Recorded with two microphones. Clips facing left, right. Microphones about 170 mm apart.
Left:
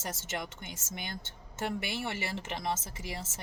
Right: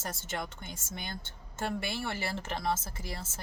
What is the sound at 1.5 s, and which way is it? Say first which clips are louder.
Speech: even; 15° left (ahead or behind).